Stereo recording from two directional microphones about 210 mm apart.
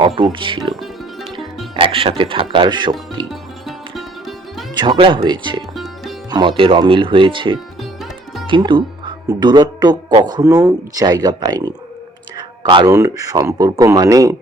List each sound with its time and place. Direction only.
0.2 s speech: 25° right (ahead or behind)
0.7 s music: centre (ahead or behind)
1.7 s speech: 25° right (ahead or behind)
3.7 s music: centre (ahead or behind)
4.7 s speech: 20° right (ahead or behind)
5.7 s music: centre (ahead or behind)
6.6 s speech: 25° right (ahead or behind)